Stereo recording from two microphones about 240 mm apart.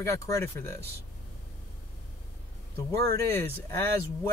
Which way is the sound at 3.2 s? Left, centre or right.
Centre.